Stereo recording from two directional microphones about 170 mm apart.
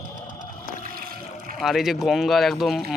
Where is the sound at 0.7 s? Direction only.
55° right (ahead or behind).